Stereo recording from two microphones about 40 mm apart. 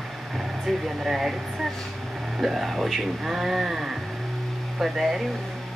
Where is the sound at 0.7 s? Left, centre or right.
Centre.